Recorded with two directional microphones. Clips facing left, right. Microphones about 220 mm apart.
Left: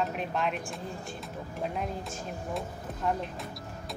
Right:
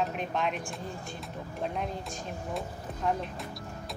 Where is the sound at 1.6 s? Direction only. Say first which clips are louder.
Even; centre (ahead or behind).